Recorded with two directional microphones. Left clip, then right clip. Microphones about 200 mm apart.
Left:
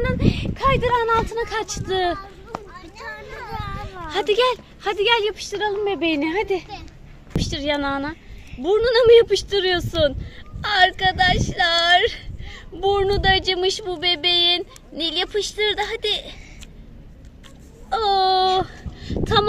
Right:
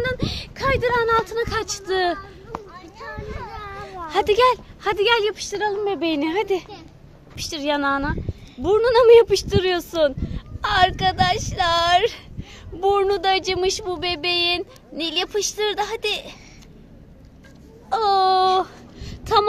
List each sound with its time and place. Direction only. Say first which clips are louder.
0.0 s speech: left 2 dB; 5° left (ahead or behind)
2.1 s a sound: left 1 dB; 40° left (ahead or behind)
4.1 s speech: right 2 dB; 5° right (ahead or behind)
17.8 s whimper: right 1 dB; 5° right (ahead or behind)